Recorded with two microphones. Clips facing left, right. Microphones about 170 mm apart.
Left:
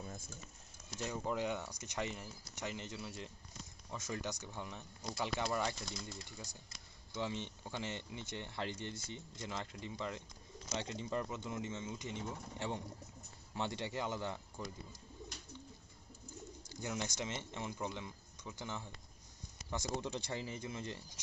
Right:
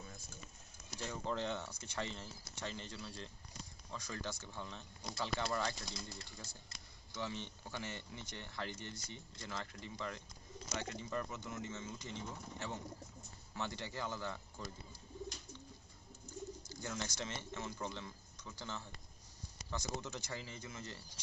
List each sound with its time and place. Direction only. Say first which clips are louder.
0.9 s speech: left 2 dB; 15° left (ahead or behind)
16.8 s speech: left 3 dB; 15° left (ahead or behind)